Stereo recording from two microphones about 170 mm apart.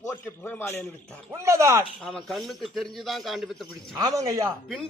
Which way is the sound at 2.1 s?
Centre (ahead or behind).